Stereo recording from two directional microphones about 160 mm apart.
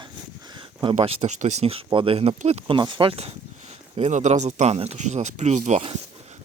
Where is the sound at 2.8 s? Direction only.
30° right (ahead or behind).